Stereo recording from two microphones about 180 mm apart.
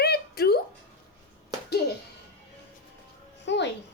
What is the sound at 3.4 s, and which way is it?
Speech, 75° left (ahead or behind).